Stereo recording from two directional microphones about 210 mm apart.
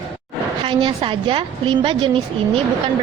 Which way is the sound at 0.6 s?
25° right (ahead or behind).